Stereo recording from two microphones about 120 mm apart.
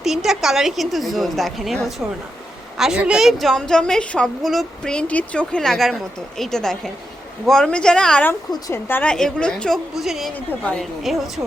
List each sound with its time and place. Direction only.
0.0 s a woman's voice: 5° right (ahead or behind)
8.6 s a woman's voice: 20° left (ahead or behind)
9.1 s a woman's voice: 5° left (ahead or behind)